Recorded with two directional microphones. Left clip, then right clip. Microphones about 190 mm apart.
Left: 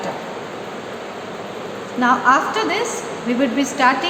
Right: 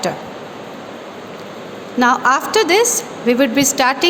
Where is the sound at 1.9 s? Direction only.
65° right (ahead or behind).